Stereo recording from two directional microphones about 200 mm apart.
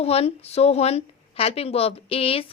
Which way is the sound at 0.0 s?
30° left (ahead or behind).